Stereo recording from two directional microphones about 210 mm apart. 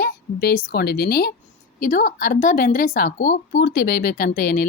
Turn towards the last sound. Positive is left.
turn(degrees=40)  # may be behind; listen again after turning